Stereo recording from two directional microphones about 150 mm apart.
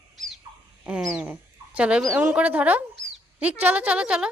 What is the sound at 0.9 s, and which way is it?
A child's voice, 5° right (ahead or behind).